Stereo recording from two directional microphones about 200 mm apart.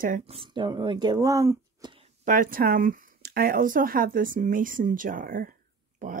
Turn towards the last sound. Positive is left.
turn(degrees=-40)  # may be behind; listen again after turning